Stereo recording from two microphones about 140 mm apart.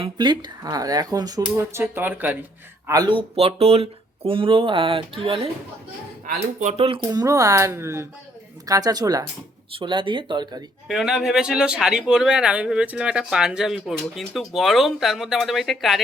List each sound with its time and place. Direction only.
0.0 s speech: 35° right (ahead or behind); by 2.4 s 15° right (ahead or behind)
2.8 s speech: 25° right (ahead or behind)
6.6 s speech: 50° right (ahead or behind)
7.1 s speech: 25° right (ahead or behind)
10.8 s speech: 5° right (ahead or behind)